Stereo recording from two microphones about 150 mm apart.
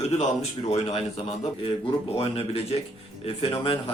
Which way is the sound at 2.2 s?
40° left (ahead or behind).